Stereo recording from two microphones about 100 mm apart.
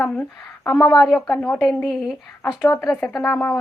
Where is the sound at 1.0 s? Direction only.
Centre (ahead or behind).